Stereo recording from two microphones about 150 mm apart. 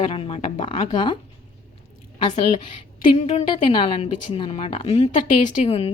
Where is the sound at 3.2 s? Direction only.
40° left (ahead or behind).